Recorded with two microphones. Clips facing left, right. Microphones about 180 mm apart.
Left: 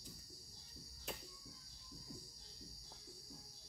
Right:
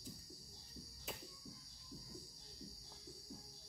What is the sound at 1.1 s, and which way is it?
Cricket, centre (ahead or behind).